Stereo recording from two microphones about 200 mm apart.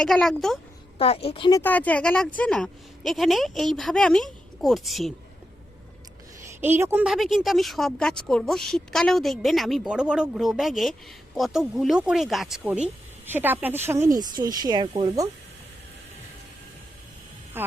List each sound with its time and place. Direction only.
0.0 s a woman's voice: centre (ahead or behind)
0.9 s a woman's voice: 30° left (ahead or behind)
1.5 s a woman's voice: 15° left (ahead or behind)
6.6 s a woman's voice: 10° right (ahead or behind)
17.5 s speech: 10° right (ahead or behind)